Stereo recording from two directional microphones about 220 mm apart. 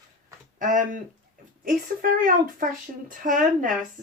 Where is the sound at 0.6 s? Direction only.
35° right (ahead or behind).